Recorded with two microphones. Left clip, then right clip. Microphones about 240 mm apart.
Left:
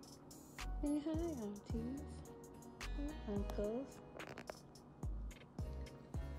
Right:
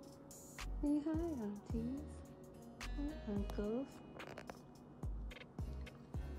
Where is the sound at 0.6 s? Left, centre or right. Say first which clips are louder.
Right 2 dB; centre.